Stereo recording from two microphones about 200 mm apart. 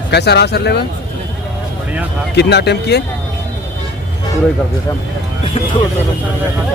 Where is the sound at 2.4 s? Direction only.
55° left (ahead or behind).